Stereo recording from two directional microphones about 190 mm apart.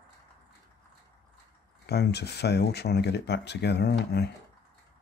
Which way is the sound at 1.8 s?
60° left (ahead or behind).